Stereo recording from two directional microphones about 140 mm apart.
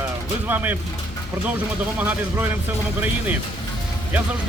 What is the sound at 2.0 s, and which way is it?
Speech, 10° right (ahead or behind).